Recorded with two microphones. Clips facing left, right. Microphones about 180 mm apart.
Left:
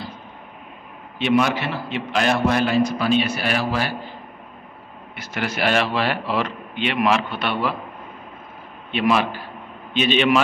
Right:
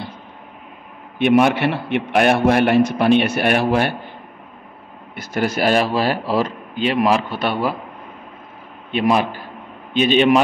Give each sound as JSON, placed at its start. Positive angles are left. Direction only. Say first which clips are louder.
{"t": 1.1, "sound": "a man's voice", "louder": "right 5 dB", "side_deg": -55}
{"t": 5.1, "sound": "a man's voice", "louder": "right 6 dB", "side_deg": -45}
{"t": 8.9, "sound": "a man's voice", "louder": "right 2 dB", "side_deg": -40}